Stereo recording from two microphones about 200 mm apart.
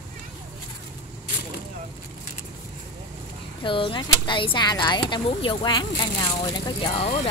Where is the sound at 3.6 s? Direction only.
25° left (ahead or behind).